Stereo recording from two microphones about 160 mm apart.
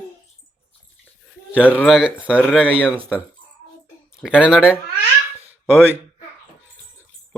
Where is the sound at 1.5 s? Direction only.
10° right (ahead or behind).